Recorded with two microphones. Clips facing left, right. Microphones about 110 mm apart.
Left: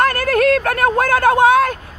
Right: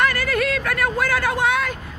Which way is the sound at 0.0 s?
50° left (ahead or behind).